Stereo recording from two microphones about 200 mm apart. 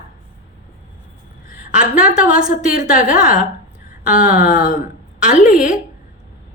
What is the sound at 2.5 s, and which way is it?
Speech, 45° left (ahead or behind).